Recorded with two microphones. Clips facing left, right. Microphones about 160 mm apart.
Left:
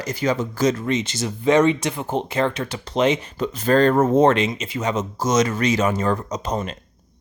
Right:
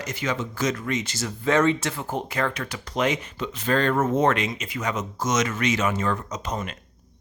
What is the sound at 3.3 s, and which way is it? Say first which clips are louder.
Speech: left 6 dB; 40° left (ahead or behind).